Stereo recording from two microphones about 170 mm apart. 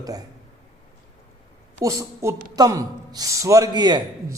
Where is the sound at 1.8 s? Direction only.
20° right (ahead or behind).